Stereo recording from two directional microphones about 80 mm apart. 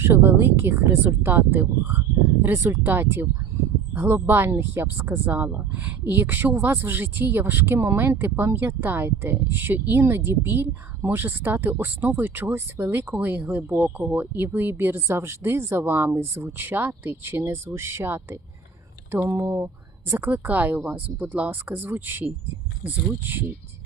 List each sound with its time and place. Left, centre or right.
0.0 s speech: right